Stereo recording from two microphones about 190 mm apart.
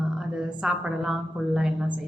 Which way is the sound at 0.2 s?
5° right (ahead or behind).